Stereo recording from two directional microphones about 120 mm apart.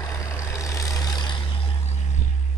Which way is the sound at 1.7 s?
65° left (ahead or behind).